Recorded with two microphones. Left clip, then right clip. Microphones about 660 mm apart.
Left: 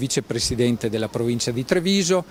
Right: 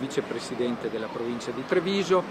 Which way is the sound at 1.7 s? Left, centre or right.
Left.